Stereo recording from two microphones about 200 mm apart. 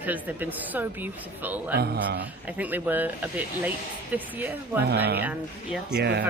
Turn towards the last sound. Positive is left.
turn(degrees=-55)  # may be behind; listen again after turning